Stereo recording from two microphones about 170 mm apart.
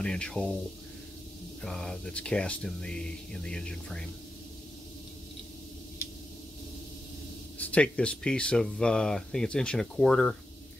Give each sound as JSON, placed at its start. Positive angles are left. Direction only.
{"t": 0.0, "sound": "speech", "side_deg": 5}
{"t": 1.6, "sound": "speech", "side_deg": 5}
{"t": 7.5, "sound": "speech", "side_deg": 10}